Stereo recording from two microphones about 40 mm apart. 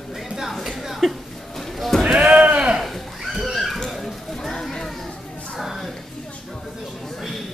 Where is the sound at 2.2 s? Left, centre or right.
Right.